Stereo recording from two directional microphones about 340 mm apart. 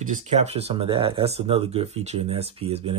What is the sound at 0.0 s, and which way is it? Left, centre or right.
Speech, right.